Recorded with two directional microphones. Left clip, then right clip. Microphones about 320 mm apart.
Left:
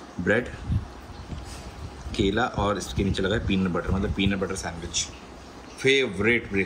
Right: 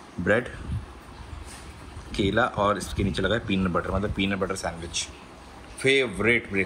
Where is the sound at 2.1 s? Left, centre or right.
Centre.